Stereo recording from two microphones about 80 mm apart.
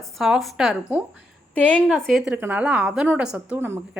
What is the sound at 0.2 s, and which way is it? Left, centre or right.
Speech, centre.